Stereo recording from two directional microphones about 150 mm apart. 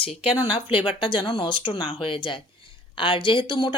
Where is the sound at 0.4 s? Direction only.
30° left (ahead or behind).